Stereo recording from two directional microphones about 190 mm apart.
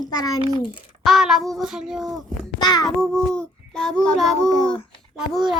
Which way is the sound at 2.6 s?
20° left (ahead or behind).